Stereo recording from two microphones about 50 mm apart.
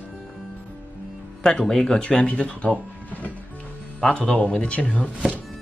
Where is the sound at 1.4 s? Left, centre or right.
Centre.